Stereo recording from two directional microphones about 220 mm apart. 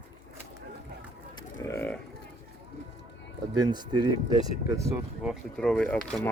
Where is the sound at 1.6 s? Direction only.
10° left (ahead or behind).